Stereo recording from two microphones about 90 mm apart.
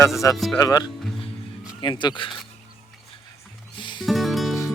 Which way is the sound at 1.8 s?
55° left (ahead or behind).